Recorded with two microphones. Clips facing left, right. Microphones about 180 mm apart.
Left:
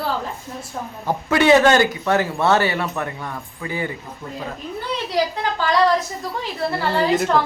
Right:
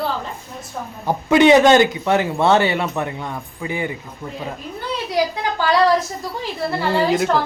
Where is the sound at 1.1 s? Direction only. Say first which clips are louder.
Right 3 dB; 20° right (ahead or behind).